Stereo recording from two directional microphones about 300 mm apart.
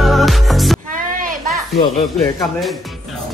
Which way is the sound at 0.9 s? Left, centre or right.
Right.